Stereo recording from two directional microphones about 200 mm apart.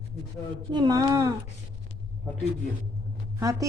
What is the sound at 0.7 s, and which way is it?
Speech, 20° right (ahead or behind).